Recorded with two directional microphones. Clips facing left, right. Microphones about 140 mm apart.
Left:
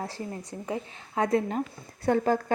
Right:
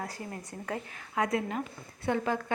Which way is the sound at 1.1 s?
35° left (ahead or behind).